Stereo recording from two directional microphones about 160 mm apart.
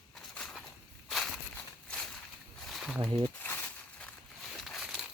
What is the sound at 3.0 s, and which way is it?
Speech, 30° right (ahead or behind).